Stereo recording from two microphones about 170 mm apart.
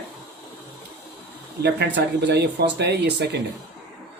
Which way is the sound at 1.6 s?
80° right.